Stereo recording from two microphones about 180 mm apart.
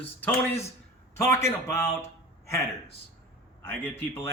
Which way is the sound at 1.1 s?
15° left (ahead or behind).